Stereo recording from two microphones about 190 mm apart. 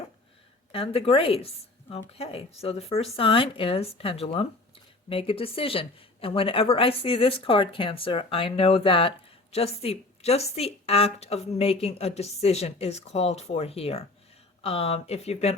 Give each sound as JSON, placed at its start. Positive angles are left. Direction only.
{"t": 0.7, "sound": "a woman's voice", "side_deg": 30}